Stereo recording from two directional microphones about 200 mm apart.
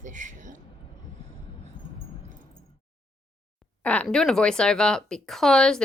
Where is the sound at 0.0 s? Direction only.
40° right (ahead or behind).